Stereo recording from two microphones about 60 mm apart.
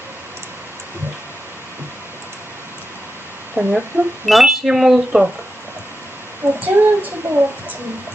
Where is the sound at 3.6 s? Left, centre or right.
Right.